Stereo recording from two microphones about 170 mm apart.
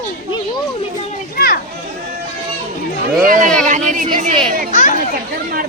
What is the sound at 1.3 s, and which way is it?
Speech, 60° left (ahead or behind).